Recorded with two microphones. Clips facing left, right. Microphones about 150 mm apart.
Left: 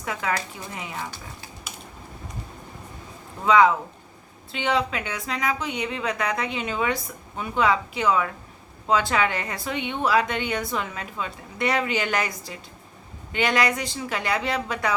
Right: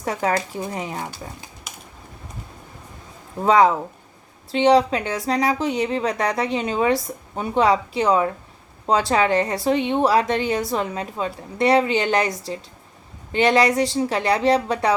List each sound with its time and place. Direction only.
0.0 s speech: 40° right (ahead or behind)
3.4 s speech: 40° right (ahead or behind)
13.3 s speech: 30° right (ahead or behind)